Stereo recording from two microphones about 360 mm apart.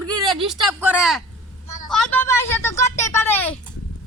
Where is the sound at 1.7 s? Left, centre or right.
Centre.